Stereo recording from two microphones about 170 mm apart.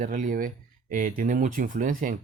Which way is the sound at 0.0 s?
50° right (ahead or behind).